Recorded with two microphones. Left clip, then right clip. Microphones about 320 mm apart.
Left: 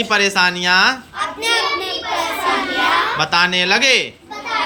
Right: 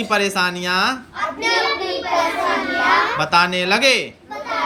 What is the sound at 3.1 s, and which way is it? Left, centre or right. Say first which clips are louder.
Speech: left 1 dB; centre.